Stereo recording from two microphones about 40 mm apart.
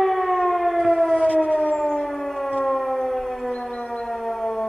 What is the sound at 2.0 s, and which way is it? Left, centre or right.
Civil defense siren, centre.